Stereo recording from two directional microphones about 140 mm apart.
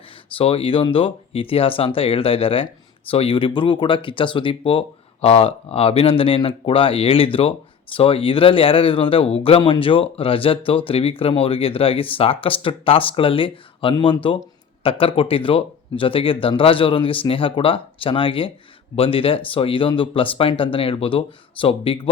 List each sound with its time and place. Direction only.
0.3 s speech: 45° left (ahead or behind)